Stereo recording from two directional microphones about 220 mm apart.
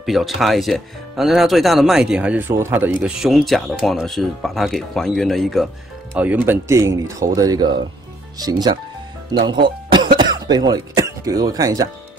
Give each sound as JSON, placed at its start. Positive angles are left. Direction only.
{"t": 0.0, "sound": "speech", "side_deg": 0}